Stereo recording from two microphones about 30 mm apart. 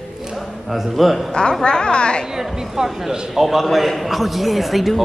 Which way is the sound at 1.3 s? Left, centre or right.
Left.